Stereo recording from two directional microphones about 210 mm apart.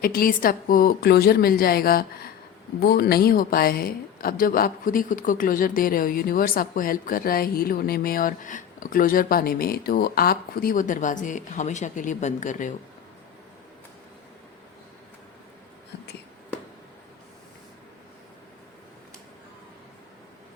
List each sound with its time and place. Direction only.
0.0 s a woman's voice: 45° left (ahead or behind)